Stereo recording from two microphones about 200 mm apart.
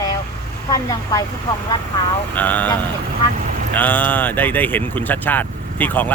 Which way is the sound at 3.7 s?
10° left (ahead or behind).